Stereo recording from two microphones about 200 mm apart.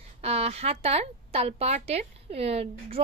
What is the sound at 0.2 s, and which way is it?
A woman's voice, 30° right (ahead or behind).